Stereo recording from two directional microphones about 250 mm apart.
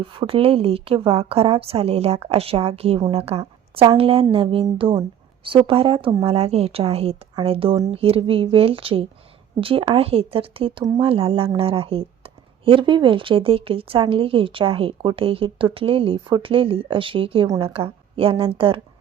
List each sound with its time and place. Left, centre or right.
0.0 s speech: right